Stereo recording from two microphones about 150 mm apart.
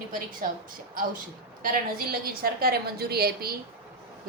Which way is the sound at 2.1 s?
80° right.